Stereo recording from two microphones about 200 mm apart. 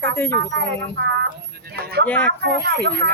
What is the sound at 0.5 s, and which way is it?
Speech, 60° right (ahead or behind).